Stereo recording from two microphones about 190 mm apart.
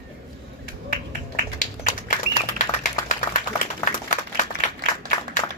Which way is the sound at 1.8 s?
40° left (ahead or behind).